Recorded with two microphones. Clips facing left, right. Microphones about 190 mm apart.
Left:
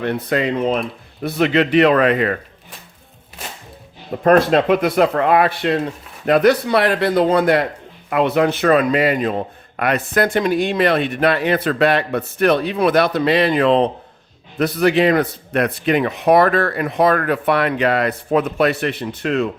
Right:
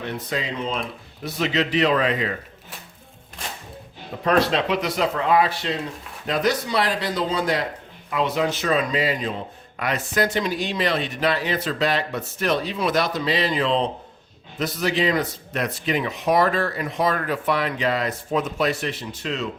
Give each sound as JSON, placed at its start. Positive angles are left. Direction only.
{"t": 0.0, "sound": "a man's voice", "side_deg": 60}
{"t": 4.2, "sound": "a man's voice", "side_deg": 50}